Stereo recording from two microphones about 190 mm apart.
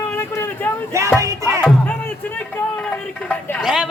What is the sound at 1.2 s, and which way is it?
Speech, 15° right (ahead or behind).